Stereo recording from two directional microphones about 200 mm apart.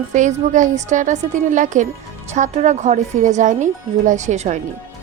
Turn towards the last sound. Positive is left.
turn(degrees=-35)  # may be behind; listen again after turning